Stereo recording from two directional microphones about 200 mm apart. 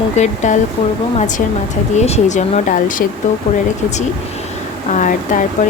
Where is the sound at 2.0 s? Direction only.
35° left (ahead or behind).